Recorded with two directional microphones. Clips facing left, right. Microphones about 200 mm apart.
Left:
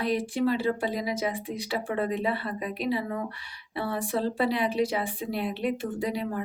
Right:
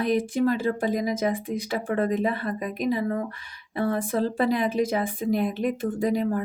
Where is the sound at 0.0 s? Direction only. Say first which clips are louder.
Right 3 dB; 50° right (ahead or behind).